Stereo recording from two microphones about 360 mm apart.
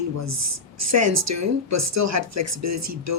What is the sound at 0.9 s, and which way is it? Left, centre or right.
Speech, right.